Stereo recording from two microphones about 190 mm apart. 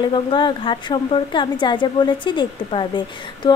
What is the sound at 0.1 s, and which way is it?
A woman's voice, 25° left (ahead or behind).